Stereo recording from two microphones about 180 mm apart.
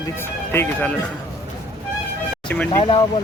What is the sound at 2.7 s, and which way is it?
Speech, 30° left (ahead or behind).